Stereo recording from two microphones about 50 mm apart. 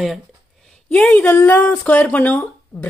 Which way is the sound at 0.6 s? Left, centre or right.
Centre.